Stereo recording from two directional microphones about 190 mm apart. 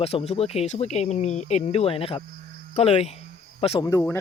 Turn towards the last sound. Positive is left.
turn(degrees=15)  # may be behind; listen again after turning